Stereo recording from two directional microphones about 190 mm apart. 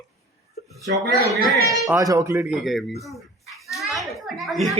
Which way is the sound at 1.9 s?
15° right (ahead or behind).